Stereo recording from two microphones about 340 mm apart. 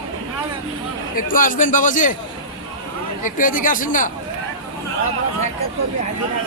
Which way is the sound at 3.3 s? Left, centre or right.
Left.